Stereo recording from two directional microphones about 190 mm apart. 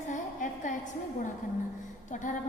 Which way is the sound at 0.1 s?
40° left (ahead or behind).